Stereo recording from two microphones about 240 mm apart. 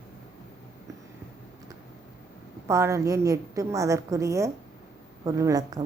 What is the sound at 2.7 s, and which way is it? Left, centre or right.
A woman's voice, centre.